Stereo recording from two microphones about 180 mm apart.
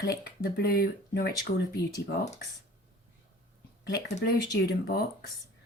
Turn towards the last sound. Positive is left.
turn(degrees=60)  # may be behind; listen again after turning